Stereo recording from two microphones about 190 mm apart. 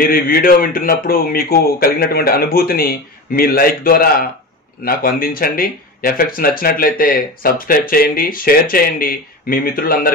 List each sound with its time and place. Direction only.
0.0 s speech: 50° left (ahead or behind)